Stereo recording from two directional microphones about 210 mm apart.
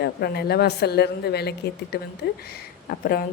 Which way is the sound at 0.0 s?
50° left (ahead or behind).